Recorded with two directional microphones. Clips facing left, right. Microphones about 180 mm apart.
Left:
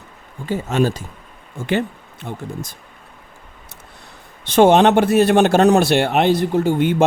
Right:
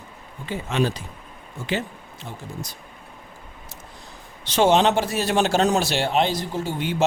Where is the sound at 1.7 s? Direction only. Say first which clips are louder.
Left 7 dB; 60° left (ahead or behind).